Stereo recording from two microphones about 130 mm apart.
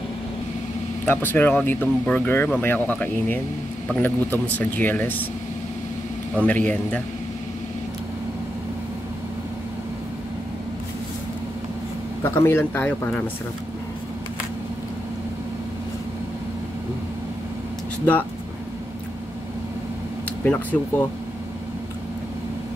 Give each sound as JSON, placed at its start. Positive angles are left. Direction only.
{"t": 1.0, "sound": "speech", "side_deg": 15}
{"t": 6.4, "sound": "speech", "side_deg": 10}
{"t": 12.2, "sound": "speech", "side_deg": 20}
{"t": 20.4, "sound": "speech", "side_deg": 15}